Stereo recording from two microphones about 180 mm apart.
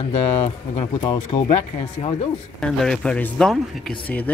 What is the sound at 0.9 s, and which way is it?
Speech, 25° left (ahead or behind).